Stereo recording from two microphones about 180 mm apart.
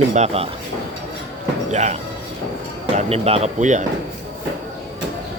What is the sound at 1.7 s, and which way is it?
Speech, 40° right (ahead or behind).